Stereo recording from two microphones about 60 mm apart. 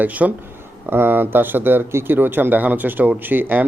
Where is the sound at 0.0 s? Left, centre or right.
Right.